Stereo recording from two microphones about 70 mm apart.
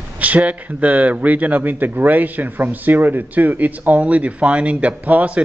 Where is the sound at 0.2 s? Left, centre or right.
Right.